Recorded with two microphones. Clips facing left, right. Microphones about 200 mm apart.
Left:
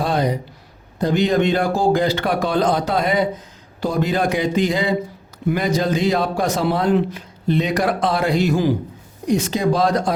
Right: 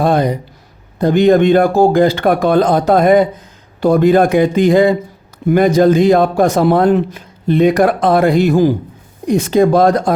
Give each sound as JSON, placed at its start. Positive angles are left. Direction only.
{"t": 0.0, "sound": "a man's voice", "side_deg": -50}